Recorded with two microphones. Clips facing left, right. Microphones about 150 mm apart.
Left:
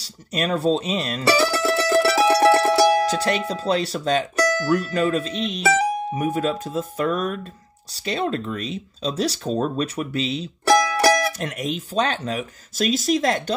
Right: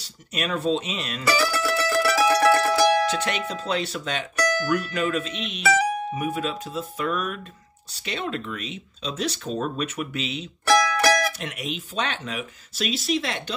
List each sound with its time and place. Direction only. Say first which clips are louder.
0.0 s speech: left 5 dB; 35° left (ahead or behind)
11.3 s speech: left 5 dB; 45° left (ahead or behind)